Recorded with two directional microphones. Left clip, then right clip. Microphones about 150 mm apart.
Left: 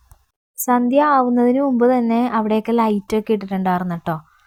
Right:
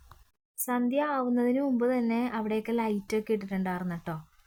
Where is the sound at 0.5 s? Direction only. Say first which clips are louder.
Left 13 dB; 35° left (ahead or behind).